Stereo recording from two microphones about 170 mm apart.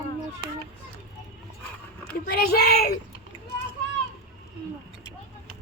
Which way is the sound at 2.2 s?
65° left (ahead or behind).